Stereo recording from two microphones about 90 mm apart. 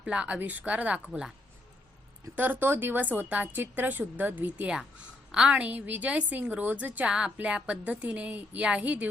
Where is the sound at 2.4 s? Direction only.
20° right (ahead or behind).